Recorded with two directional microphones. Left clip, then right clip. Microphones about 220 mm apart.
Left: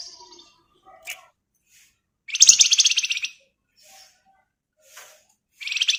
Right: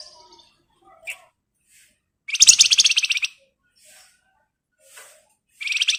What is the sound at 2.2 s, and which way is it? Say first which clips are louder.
Bird: right 1 dB; 15° right (ahead or behind).